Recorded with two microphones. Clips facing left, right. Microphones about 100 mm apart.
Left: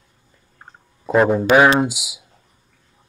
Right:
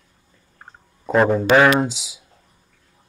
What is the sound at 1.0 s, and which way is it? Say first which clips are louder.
A man's voice: left 1 dB; 5° left (ahead or behind).